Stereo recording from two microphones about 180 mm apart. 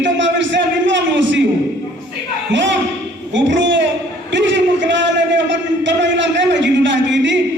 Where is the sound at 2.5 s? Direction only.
90° right.